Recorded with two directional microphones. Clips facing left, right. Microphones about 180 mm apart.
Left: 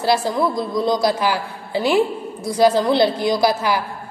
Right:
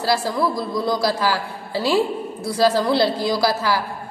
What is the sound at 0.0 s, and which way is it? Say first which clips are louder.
A man's voice: left 2 dB; 20° left (ahead or behind).